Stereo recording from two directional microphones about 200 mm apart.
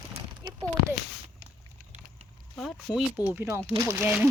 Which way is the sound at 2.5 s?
Centre (ahead or behind).